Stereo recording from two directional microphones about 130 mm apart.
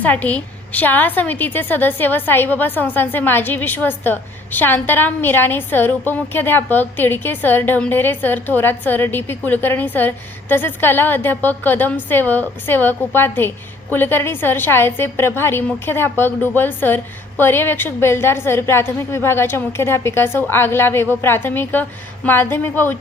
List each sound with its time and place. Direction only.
0.0 s a woman's voice: 10° left (ahead or behind)